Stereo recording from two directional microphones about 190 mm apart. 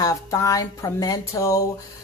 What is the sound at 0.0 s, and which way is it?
Speech, 20° left (ahead or behind).